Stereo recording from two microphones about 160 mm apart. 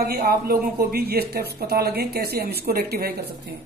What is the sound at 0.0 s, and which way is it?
Speech, 70° right (ahead or behind).